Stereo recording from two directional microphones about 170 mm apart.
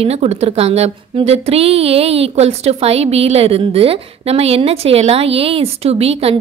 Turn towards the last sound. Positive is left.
turn(degrees=-35)  # may be behind; listen again after turning